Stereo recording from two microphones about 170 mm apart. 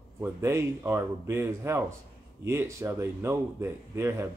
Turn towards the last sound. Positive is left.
turn(degrees=-15)  # may be behind; listen again after turning